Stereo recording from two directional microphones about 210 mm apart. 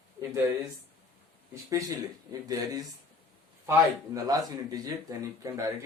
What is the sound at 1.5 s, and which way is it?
Speech, 15° right (ahead or behind).